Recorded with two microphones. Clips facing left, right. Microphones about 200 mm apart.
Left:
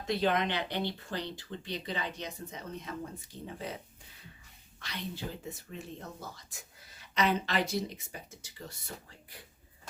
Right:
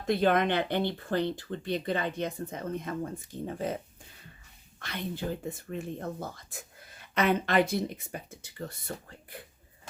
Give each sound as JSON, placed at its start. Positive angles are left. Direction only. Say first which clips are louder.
{"t": 0.0, "sound": "speech", "louder": "right 5 dB", "side_deg": -50}
{"t": 4.8, "sound": "speech", "louder": "right 5 dB", "side_deg": -55}